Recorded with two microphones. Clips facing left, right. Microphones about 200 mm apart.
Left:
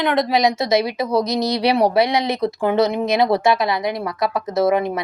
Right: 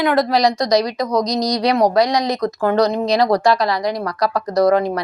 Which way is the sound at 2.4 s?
10° left (ahead or behind).